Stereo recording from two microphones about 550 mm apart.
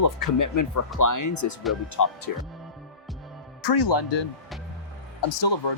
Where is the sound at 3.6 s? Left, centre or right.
Left.